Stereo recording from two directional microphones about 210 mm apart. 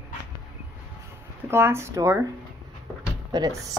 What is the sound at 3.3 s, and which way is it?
Speech, 15° right (ahead or behind).